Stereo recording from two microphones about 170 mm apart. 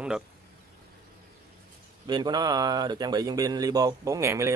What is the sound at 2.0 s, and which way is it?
Speech, 25° right (ahead or behind).